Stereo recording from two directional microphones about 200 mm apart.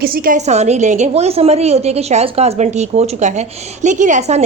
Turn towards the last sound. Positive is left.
turn(degrees=-35)  # may be behind; listen again after turning